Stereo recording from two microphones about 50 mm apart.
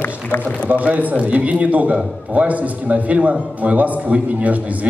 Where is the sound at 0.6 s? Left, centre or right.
Right.